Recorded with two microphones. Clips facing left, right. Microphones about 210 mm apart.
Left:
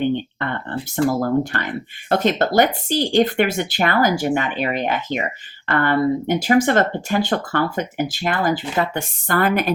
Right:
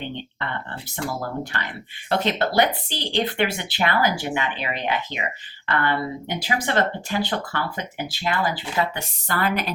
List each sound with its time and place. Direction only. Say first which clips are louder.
1.0 s speech: left 10 dB; 45° left (ahead or behind)